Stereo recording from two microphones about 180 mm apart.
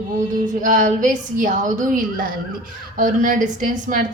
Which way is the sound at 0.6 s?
45° right (ahead or behind).